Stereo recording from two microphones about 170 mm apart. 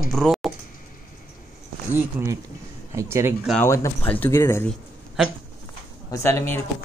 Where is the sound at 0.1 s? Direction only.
Centre (ahead or behind).